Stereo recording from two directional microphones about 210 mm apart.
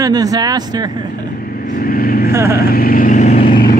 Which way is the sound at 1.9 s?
45° left (ahead or behind).